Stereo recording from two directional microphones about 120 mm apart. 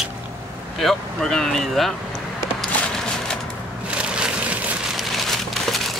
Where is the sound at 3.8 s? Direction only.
10° right (ahead or behind).